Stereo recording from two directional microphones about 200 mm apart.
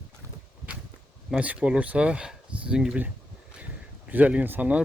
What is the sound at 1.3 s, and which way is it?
Speech, 5° right (ahead or behind).